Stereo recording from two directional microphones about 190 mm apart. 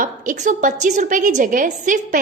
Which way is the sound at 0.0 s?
45° right (ahead or behind).